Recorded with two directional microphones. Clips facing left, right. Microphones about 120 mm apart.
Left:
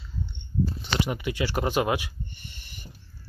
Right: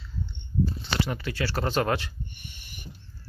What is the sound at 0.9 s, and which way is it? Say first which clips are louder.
Speech: left 2 dB; 15° left (ahead or behind).